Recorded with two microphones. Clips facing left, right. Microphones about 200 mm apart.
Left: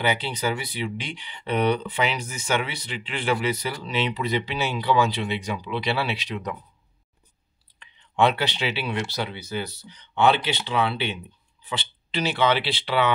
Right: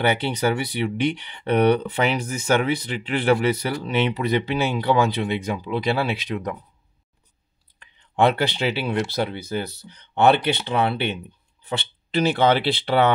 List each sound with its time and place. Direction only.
0.0 s speech: 60° right (ahead or behind)
7.8 s speech: 50° right (ahead or behind)